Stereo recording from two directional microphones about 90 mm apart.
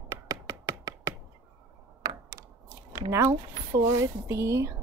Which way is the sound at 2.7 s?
35° right (ahead or behind).